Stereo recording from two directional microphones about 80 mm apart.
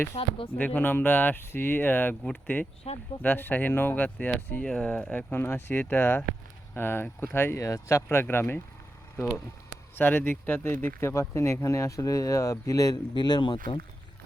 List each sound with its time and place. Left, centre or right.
0.6 s speech: left
4.6 s speech: centre; by 8.6 s left
9.9 s speech: left
13.1 s speech: left